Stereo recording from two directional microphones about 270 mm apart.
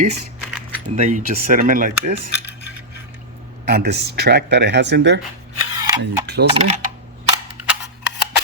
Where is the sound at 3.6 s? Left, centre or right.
Right.